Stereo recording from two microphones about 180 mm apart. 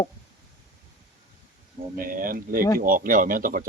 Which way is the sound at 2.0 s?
50° right (ahead or behind).